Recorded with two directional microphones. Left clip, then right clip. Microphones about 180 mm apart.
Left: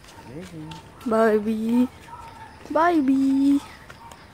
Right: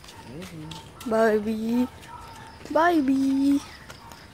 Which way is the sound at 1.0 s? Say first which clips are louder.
Left 2 dB; 20° left (ahead or behind).